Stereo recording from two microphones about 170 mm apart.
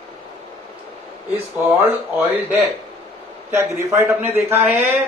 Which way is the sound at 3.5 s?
15° right (ahead or behind).